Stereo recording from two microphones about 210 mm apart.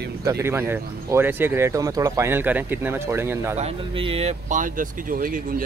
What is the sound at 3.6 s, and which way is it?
Speech, 25° right (ahead or behind).